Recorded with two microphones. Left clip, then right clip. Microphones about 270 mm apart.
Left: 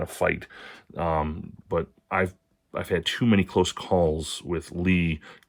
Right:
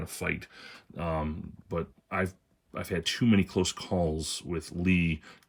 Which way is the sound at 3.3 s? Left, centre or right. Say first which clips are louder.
Left 7 dB; centre.